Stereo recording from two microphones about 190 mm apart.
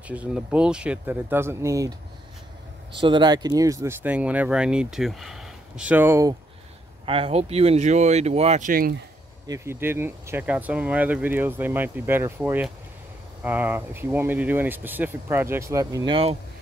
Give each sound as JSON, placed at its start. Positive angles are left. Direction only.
{"t": 0.1, "sound": "speech", "side_deg": -5}
{"t": 3.0, "sound": "speech", "side_deg": -25}
{"t": 7.1, "sound": "speech", "side_deg": -30}
{"t": 9.5, "sound": "speech", "side_deg": -10}